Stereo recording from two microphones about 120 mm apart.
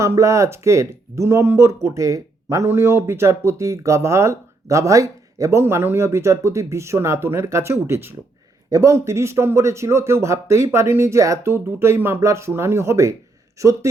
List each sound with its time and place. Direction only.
0.0 s speech: 25° right (ahead or behind)